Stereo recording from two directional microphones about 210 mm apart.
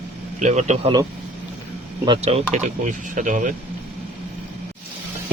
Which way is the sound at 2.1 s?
30° right (ahead or behind).